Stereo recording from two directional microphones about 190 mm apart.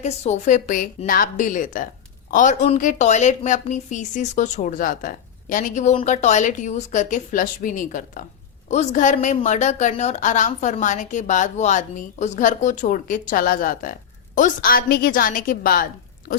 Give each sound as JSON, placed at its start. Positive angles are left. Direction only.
{"t": 0.0, "sound": "a woman's voice", "side_deg": 35}